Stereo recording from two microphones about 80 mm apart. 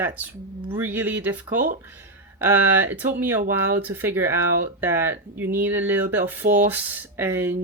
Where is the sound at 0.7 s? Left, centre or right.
Right.